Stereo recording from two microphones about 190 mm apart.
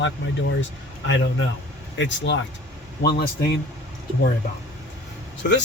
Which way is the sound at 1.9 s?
70° left (ahead or behind).